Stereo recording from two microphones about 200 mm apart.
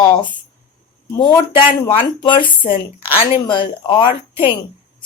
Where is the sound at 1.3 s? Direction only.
25° left (ahead or behind).